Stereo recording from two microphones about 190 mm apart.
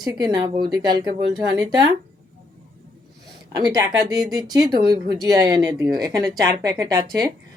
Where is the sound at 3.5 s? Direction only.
20° right (ahead or behind).